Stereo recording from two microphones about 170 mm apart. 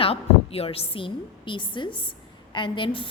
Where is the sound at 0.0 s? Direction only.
35° left (ahead or behind).